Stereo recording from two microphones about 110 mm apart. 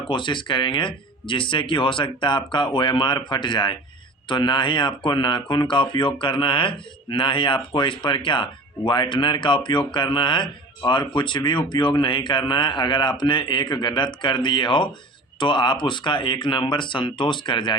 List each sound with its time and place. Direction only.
0.1 s speech: 50° left (ahead or behind)